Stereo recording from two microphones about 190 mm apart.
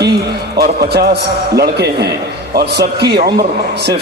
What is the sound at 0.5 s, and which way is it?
A man's voice, 55° right (ahead or behind).